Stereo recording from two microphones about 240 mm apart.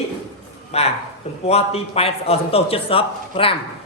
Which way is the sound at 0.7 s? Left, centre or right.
Left.